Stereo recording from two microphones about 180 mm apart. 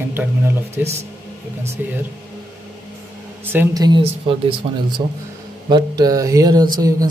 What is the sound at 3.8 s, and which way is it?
Speech, 25° right (ahead or behind).